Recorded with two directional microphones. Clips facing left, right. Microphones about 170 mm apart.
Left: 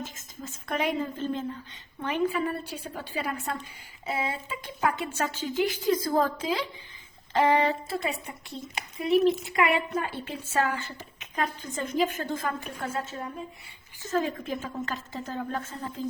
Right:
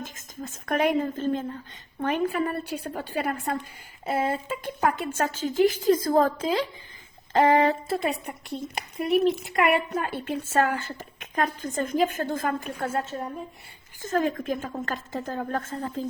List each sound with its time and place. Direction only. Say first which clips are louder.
0.0 s a woman's voice: right 2 dB; 55° right (ahead or behind)